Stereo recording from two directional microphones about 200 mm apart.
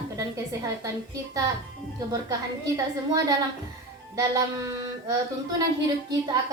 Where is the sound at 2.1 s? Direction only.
15° right (ahead or behind).